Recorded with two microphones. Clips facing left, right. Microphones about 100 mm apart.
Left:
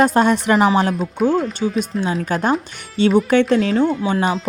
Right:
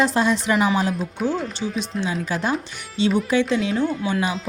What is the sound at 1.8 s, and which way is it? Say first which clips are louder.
Speech: left 4 dB; 45° left (ahead or behind).